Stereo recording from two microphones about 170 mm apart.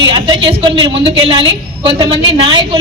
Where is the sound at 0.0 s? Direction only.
30° right (ahead or behind).